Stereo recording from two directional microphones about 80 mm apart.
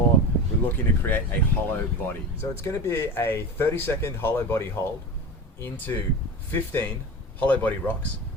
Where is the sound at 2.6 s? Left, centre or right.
Left.